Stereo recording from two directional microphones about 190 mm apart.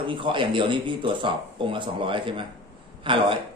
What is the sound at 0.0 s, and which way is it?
A man's voice, 25° right (ahead or behind).